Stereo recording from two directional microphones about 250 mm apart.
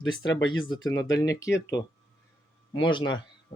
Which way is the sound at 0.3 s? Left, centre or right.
Left.